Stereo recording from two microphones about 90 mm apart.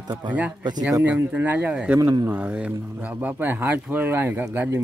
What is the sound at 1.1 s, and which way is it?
Speech, 20° right (ahead or behind).